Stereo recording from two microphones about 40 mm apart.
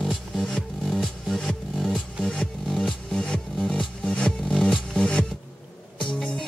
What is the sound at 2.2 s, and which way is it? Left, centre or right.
Music, centre.